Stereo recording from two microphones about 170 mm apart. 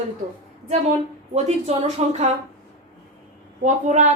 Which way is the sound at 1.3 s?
40° right (ahead or behind).